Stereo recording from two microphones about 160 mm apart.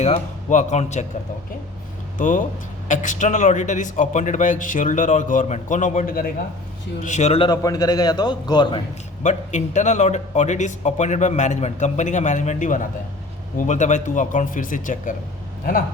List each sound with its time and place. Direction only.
0.0 s speech: 45° left (ahead or behind)
2.1 s speech: 55° left (ahead or behind)
7.0 s speech: 45° left (ahead or behind)
7.4 s a man's voice: 25° left (ahead or behind)
9.2 s speech: 50° left (ahead or behind)